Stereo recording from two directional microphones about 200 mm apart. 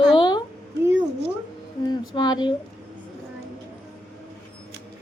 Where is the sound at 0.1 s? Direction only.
20° left (ahead or behind).